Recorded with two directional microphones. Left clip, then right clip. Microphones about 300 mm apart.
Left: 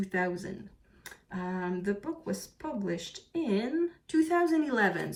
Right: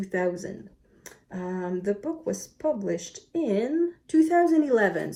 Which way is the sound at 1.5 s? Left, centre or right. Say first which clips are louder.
Right 5 dB; right.